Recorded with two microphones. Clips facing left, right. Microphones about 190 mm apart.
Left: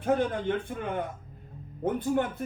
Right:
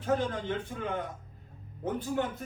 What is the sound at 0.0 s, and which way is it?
A man's voice, 60° left (ahead or behind).